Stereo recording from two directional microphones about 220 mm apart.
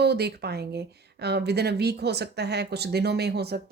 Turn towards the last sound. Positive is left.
turn(degrees=-45)  # may be behind; listen again after turning